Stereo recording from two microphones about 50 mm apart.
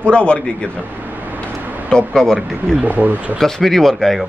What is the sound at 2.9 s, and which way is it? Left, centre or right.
Speech, right.